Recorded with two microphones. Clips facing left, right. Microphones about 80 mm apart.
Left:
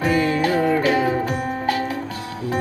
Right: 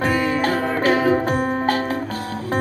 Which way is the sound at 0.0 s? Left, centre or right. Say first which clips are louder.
Even; right.